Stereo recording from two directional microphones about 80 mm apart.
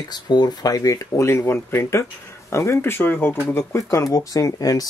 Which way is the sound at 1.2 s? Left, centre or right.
Left.